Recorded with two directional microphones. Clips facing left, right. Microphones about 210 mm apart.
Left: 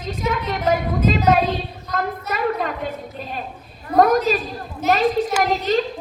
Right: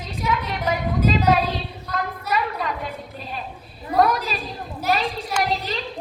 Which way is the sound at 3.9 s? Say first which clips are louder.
Left 5 dB; 45° left (ahead or behind).